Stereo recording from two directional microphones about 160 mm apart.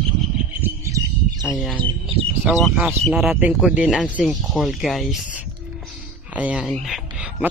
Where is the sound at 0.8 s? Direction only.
20° right (ahead or behind).